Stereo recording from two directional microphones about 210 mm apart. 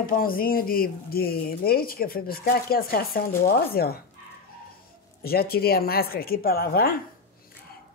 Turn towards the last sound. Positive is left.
turn(degrees=45)  # may be behind; listen again after turning